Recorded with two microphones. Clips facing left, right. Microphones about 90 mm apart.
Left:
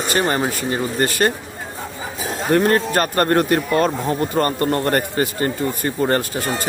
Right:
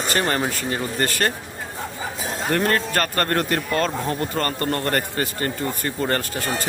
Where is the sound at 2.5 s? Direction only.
20° left (ahead or behind).